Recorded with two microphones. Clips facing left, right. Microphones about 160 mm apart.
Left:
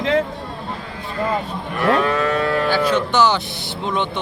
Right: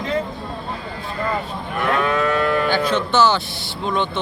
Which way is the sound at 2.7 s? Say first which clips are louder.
Left 1 dB; 10° left (ahead or behind).